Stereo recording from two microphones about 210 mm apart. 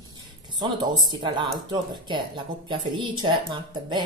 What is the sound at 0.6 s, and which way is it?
Speech, 20° right (ahead or behind).